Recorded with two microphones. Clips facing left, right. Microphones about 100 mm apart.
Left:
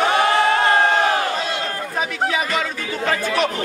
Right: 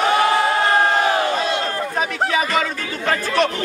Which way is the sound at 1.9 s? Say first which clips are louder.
Right 1 dB; centre (ahead or behind).